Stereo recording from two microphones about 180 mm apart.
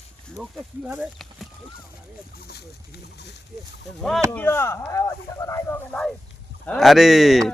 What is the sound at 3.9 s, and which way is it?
Speech, centre (ahead or behind).